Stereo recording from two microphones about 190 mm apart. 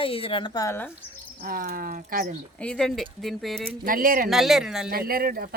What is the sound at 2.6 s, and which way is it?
Speech, 5° left (ahead or behind).